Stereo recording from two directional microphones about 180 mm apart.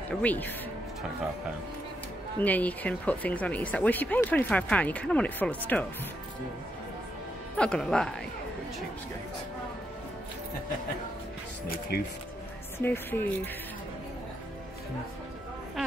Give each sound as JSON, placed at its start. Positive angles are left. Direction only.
{"t": 0.2, "sound": "speech", "side_deg": 10}
{"t": 2.4, "sound": "speech", "side_deg": 10}
{"t": 7.5, "sound": "speech", "side_deg": 5}
{"t": 11.6, "sound": "speech", "side_deg": 55}
{"t": 12.7, "sound": "speech", "side_deg": 10}